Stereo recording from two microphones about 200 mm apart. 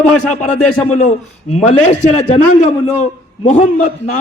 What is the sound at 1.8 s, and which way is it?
A man's voice, 35° left (ahead or behind).